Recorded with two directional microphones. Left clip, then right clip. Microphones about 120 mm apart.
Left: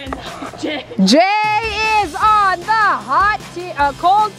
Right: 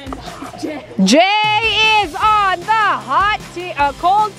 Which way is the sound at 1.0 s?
15° right (ahead or behind).